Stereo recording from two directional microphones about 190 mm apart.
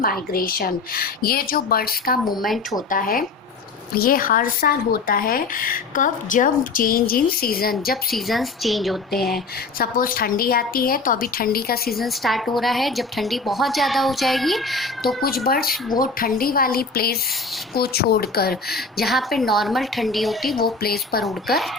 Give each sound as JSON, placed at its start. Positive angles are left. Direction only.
{"t": 0.0, "sound": "speech", "side_deg": 50}
{"t": 8.1, "sound": "a woman's voice", "side_deg": 0}
{"t": 9.7, "sound": "speech", "side_deg": 50}
{"t": 12.0, "sound": "a woman's voice", "side_deg": 0}
{"t": 15.0, "sound": "speech", "side_deg": 50}
{"t": 19.0, "sound": "a woman's voice", "side_deg": 0}
{"t": 20.8, "sound": "speech", "side_deg": 55}
{"t": 21.2, "sound": "a woman's voice", "side_deg": 0}